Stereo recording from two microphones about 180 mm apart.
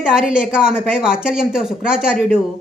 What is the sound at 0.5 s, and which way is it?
Speech, 5° right (ahead or behind).